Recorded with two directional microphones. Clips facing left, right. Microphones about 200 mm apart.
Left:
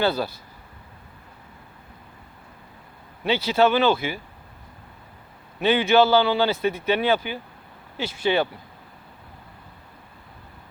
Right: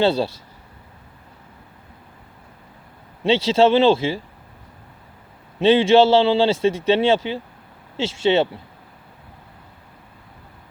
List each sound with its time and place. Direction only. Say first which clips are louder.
0.0 s a man's voice: right 5 dB; 25° right (ahead or behind)
3.4 s a man's voice: right 4 dB; 30° right (ahead or behind)
5.5 s a man's voice: right 5 dB; 30° right (ahead or behind)